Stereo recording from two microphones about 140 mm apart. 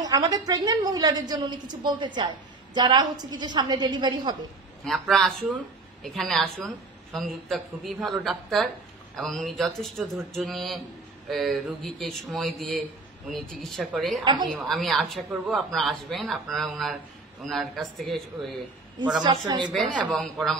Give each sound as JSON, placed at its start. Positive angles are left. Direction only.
{"t": 0.0, "sound": "a woman's voice", "side_deg": -25}
{"t": 4.8, "sound": "a woman's voice", "side_deg": 0}
{"t": 14.2, "sound": "a woman's voice", "side_deg": -30}
{"t": 14.5, "sound": "a woman's voice", "side_deg": 0}
{"t": 19.2, "sound": "a woman's voice", "side_deg": -35}
{"t": 19.6, "sound": "a woman's voice", "side_deg": 0}